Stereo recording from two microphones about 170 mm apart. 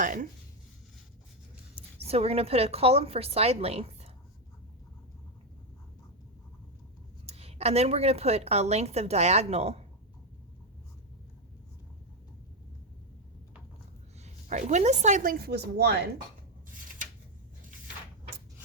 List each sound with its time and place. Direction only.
0.0 s speech: 50° right (ahead or behind)
2.0 s a woman's voice: 35° right (ahead or behind)
7.3 s a woman's voice: 35° right (ahead or behind)
14.3 s speech: 45° right (ahead or behind); by 16.0 s 75° right (ahead or behind)